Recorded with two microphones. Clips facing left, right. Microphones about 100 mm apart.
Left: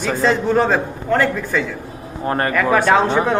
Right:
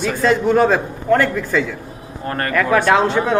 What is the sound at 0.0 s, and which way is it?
Speech, 15° left (ahead or behind).